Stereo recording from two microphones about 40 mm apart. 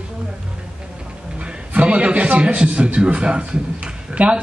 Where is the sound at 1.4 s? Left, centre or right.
Right.